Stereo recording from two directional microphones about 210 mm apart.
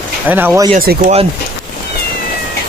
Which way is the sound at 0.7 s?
40° right (ahead or behind).